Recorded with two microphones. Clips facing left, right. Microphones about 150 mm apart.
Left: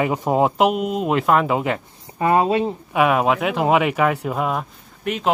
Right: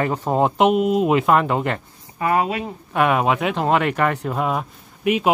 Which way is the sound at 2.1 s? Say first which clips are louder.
Left 3 dB; 30° left (ahead or behind).